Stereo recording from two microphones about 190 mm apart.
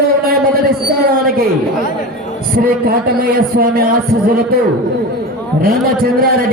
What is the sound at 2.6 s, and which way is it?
A man's voice, 50° right (ahead or behind).